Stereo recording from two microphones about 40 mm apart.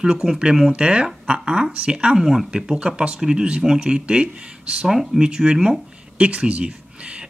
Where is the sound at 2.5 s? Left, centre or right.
Right.